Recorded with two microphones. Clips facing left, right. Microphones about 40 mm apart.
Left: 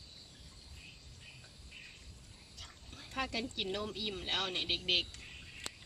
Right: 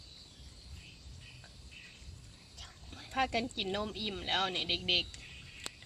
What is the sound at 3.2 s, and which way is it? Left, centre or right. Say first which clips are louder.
Speech: right 5 dB; right.